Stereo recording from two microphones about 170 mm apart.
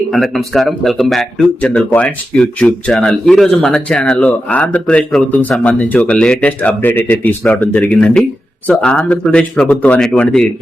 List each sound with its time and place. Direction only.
0.1 s speech: centre (ahead or behind)